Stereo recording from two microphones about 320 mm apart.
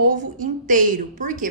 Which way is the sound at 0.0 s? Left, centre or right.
Right.